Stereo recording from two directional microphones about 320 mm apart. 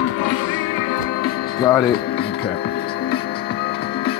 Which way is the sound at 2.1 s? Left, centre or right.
Left.